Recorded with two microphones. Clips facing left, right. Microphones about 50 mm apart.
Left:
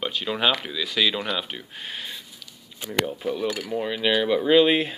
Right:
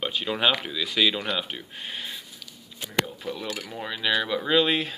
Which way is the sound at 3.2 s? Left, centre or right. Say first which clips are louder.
Left 6 dB; centre.